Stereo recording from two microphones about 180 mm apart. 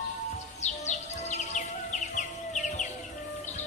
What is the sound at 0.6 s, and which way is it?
Music, 40° left (ahead or behind).